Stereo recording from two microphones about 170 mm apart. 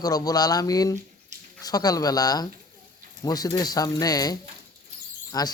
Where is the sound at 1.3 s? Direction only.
45° right (ahead or behind).